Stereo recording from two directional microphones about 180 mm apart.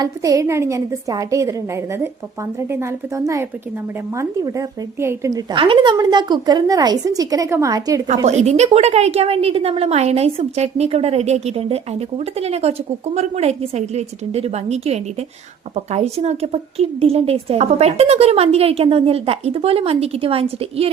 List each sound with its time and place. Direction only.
0.0 s a woman's voice: 20° right (ahead or behind)
8.3 s a woman's voice: 40° right (ahead or behind)